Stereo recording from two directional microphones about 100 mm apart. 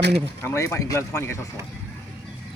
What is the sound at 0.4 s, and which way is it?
Speech, 30° left (ahead or behind).